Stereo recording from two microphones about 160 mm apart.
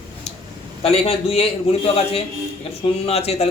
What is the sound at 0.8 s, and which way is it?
Speech, 40° left (ahead or behind).